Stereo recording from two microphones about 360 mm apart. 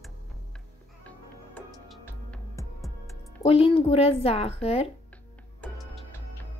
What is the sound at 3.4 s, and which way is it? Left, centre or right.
Speech, centre.